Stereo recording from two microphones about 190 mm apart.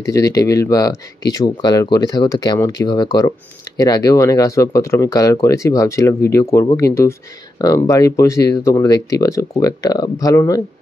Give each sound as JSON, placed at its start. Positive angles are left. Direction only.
{"t": 0.1, "sound": "speech", "side_deg": 15}